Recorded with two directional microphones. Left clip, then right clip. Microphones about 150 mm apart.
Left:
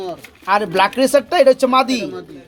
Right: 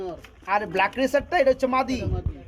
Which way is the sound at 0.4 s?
20° left (ahead or behind).